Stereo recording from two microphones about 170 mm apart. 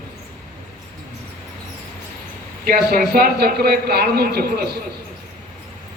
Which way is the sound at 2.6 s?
60° right (ahead or behind).